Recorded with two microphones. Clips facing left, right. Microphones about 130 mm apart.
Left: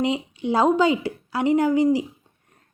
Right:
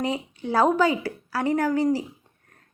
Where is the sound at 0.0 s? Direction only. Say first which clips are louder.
Left 4 dB; 20° left (ahead or behind).